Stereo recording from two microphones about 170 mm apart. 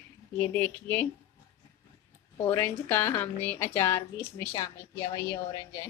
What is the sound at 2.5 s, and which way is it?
A woman's voice, 10° left (ahead or behind).